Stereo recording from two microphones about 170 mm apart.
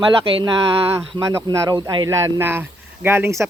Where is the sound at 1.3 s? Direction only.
15° right (ahead or behind).